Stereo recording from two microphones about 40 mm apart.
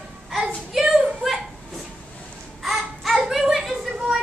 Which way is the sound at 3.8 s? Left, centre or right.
Centre.